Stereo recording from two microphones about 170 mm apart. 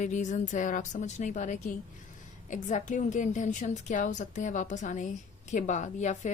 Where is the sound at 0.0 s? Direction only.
45° left (ahead or behind).